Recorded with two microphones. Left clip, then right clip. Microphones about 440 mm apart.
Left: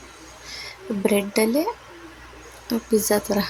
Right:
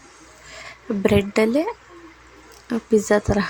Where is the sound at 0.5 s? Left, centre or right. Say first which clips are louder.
Right 2 dB; left.